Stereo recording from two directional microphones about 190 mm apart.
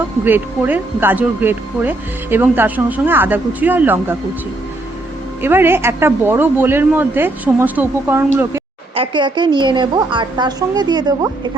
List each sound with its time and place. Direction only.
0.3 s speech: 10° right (ahead or behind)
5.4 s speech: 10° right (ahead or behind)
9.0 s a woman's voice: 25° right (ahead or behind)